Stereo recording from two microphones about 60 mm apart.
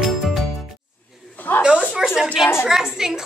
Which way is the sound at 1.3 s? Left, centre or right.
Left.